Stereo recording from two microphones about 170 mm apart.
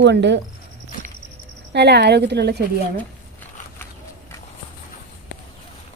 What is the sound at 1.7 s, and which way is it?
Speech, 80° right.